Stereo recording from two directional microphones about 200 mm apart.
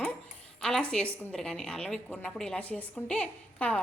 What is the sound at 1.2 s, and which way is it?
A woman's voice, 5° left (ahead or behind).